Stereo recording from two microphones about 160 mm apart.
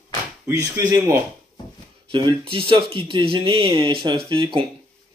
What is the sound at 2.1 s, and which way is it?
Speech, 35° right (ahead or behind).